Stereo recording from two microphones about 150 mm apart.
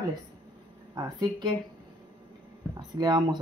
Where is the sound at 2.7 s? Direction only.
25° right (ahead or behind).